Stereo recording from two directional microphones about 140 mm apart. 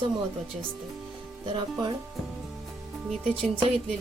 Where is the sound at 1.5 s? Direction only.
30° right (ahead or behind).